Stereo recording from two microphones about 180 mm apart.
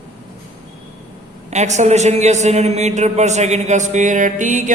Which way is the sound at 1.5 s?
40° right (ahead or behind).